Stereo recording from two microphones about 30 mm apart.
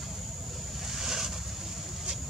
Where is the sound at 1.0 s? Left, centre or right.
Centre.